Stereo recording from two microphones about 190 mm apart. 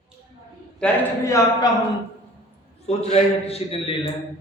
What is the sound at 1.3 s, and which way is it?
Speech, 15° left (ahead or behind).